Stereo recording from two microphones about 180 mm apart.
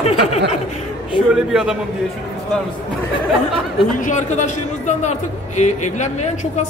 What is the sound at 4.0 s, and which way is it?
Speech, 40° left (ahead or behind).